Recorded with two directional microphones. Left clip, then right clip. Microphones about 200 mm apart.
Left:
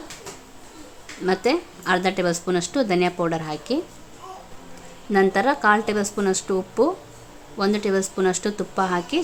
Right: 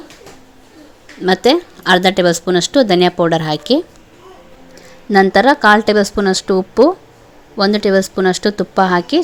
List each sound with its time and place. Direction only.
1.2 s a woman's voice: 30° right (ahead or behind)
5.1 s a woman's voice: 35° right (ahead or behind)